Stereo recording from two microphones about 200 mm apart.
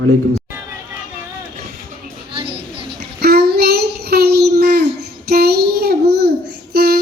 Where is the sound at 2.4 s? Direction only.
55° right (ahead or behind).